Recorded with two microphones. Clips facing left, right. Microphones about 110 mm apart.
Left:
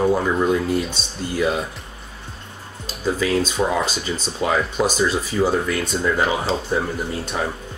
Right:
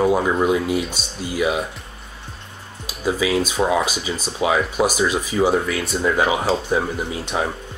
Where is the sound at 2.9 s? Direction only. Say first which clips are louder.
Right 1 dB; 10° right (ahead or behind).